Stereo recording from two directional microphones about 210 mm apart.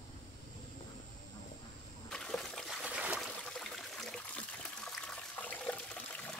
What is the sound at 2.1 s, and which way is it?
Trickle, 5° left (ahead or behind).